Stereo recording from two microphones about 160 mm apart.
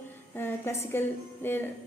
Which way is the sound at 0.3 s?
15° left (ahead or behind).